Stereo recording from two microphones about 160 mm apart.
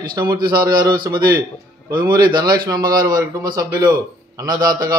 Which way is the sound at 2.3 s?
25° right (ahead or behind).